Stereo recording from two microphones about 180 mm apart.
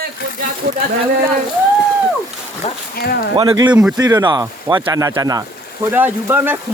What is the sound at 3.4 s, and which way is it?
Speech, 25° right (ahead or behind).